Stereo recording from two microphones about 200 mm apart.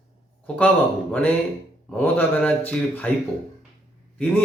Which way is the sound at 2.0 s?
10° left (ahead or behind).